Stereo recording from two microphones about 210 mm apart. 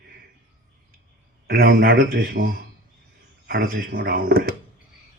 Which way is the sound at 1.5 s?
45° right (ahead or behind).